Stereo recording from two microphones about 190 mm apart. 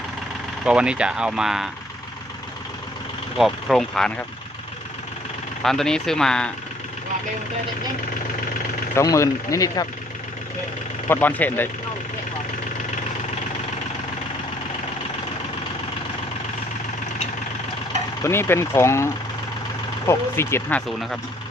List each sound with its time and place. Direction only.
0.6 s speech: 5° right (ahead or behind)
3.3 s speech: centre (ahead or behind)
5.6 s speech: centre (ahead or behind)
9.0 s speech: 15° left (ahead or behind)
11.1 s speech: 10° left (ahead or behind)
18.2 s speech: 15° left (ahead or behind)